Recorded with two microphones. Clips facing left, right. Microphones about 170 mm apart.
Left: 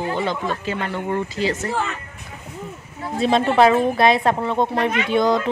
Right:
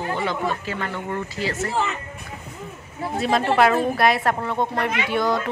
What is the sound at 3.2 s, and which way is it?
A woman's voice, 25° left (ahead or behind).